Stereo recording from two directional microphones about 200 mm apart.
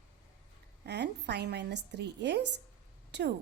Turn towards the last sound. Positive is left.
turn(degrees=-60)  # may be behind; listen again after turning